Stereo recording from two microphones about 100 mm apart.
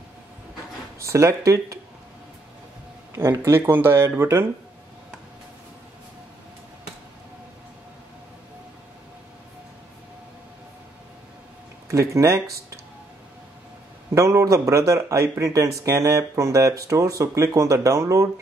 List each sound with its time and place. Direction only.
1.0 s speech: 30° right (ahead or behind)
3.2 s speech: 25° right (ahead or behind)
11.9 s speech: 30° right (ahead or behind)
14.1 s speech: 30° right (ahead or behind)